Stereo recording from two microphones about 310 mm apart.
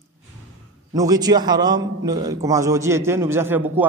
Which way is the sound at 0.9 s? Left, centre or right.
Centre.